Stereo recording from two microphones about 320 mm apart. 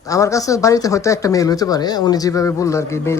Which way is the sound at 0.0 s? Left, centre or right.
Centre.